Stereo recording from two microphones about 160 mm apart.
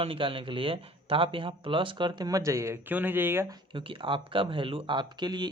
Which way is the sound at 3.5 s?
30° right (ahead or behind).